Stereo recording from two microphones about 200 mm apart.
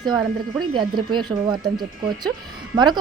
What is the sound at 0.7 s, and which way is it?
Speech, 25° right (ahead or behind).